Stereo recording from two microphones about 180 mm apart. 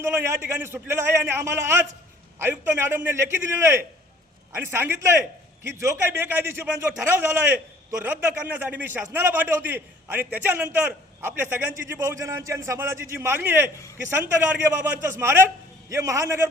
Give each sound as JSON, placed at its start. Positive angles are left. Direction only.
{"t": 0.6, "sound": "a man's voice", "side_deg": -15}